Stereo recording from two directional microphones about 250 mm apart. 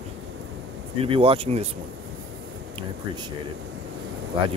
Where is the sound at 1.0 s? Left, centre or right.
Right.